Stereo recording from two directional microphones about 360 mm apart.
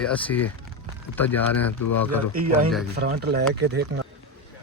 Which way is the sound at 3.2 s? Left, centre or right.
Right.